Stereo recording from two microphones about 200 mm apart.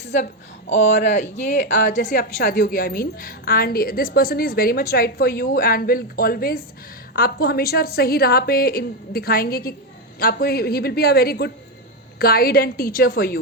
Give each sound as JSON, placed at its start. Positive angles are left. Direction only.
{"t": 0.9, "sound": "a woman's voice", "side_deg": 35}